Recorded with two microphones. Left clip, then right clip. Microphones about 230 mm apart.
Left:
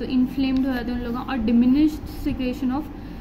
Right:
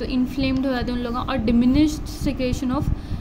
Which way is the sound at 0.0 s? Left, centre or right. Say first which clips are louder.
Even; right.